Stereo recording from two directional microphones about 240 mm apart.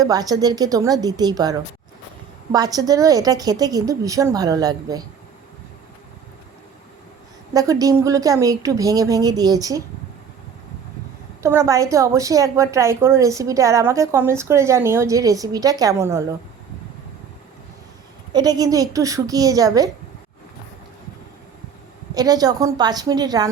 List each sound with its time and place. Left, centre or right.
0.0 s a woman's voice: centre
7.5 s a woman's voice: centre
11.4 s a woman's voice: centre
18.3 s a woman's voice: centre
22.1 s a woman's voice: centre